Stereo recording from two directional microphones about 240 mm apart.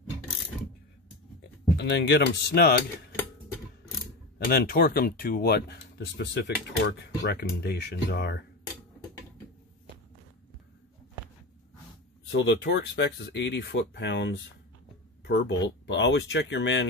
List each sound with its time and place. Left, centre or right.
1.8 s speech: left
4.5 s speech: left
12.3 s speech: left